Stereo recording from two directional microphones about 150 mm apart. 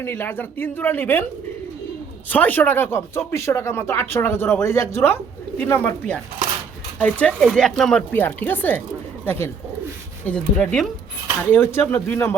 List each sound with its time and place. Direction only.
0.0 s speech: 15° left (ahead or behind)
2.3 s speech: 10° left (ahead or behind)